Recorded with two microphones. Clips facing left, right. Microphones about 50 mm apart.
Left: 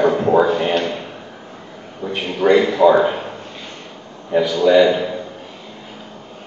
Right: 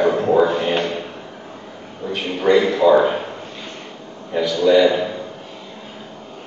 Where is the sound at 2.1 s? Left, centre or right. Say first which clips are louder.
Left 2 dB; centre.